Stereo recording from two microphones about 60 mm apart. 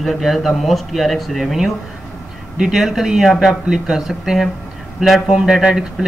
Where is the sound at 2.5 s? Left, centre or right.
Centre.